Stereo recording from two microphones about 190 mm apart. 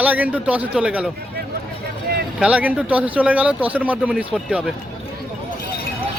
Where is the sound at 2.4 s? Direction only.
5° right (ahead or behind).